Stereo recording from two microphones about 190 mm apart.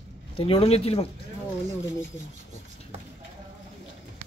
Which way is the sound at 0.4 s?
30° left (ahead or behind).